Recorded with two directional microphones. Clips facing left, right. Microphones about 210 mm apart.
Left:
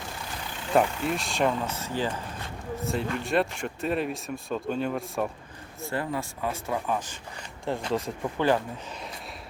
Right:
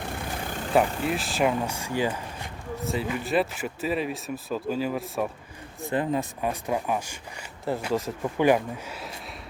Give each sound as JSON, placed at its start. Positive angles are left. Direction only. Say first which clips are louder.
{"t": 0.0, "sound": "vehicle", "louder": "right 5 dB", "side_deg": -55}
{"t": 0.7, "sound": "speech", "louder": "right 1 dB", "side_deg": -5}
{"t": 2.7, "sound": "speech", "louder": "right 1 dB", "side_deg": 0}
{"t": 5.8, "sound": "speech", "louder": "right 4 dB", "side_deg": -20}
{"t": 8.4, "sound": "speech", "louder": "right 4 dB", "side_deg": -15}